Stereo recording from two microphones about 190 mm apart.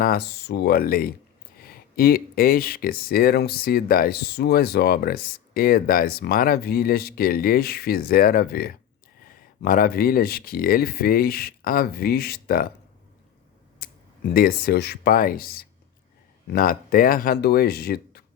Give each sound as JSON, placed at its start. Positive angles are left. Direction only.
{"t": 0.0, "sound": "speech", "side_deg": 55}
{"t": 13.8, "sound": "a sound", "side_deg": 50}
{"t": 14.3, "sound": "speech", "side_deg": 50}